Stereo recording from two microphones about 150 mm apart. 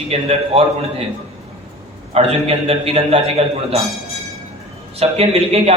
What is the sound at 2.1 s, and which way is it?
A man's voice, 40° right (ahead or behind).